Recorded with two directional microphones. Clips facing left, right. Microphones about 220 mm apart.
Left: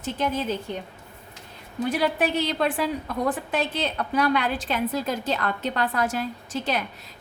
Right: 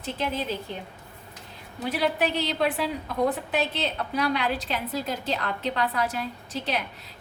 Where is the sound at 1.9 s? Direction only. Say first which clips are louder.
Left 1 dB; 45° left (ahead or behind).